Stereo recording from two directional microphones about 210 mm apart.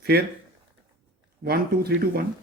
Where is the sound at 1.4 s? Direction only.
50° right (ahead or behind).